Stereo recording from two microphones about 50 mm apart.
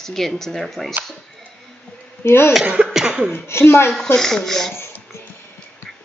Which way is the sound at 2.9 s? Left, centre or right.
Centre.